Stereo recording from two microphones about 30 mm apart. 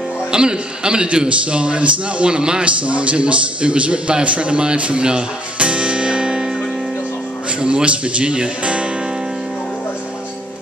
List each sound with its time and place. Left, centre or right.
0.3 s speech: right
1.4 s a man's voice: right
2.6 s a man's voice: right
5.0 s music: right
7.6 s a man's voice: right